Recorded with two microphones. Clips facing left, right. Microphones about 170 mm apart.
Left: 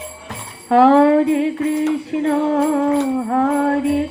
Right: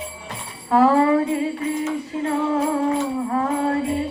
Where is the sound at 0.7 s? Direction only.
75° left (ahead or behind).